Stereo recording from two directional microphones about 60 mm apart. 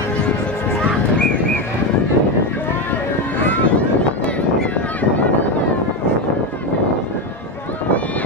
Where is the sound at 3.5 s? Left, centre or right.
Left.